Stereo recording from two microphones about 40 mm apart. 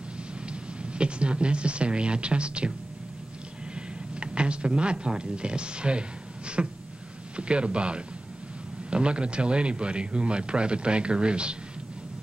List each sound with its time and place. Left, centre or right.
0.5 s speech: right
4.1 s speech: right